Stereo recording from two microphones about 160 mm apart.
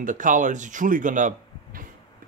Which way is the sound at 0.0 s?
55° right (ahead or behind).